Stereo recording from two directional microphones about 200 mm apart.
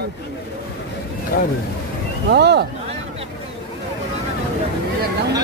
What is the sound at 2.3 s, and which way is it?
Speech, 55° right (ahead or behind).